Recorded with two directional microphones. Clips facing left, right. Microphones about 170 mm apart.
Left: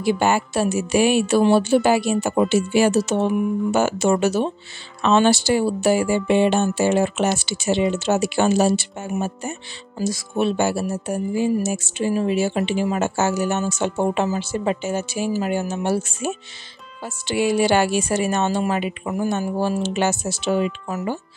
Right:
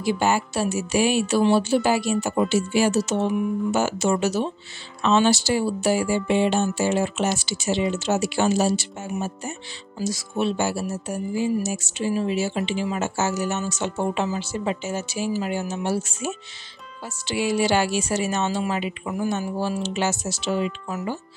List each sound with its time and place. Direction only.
0.0 s speech: 60° left (ahead or behind)